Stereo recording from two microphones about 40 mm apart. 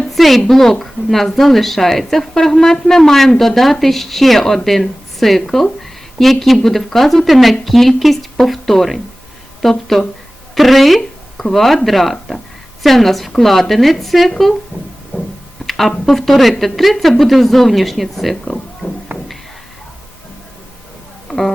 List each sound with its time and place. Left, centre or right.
0.2 s a woman's voice: centre
10.5 s a sound: centre
11.4 s speech: centre
15.6 s speech: centre
18.8 s music: left
21.2 s a sound: centre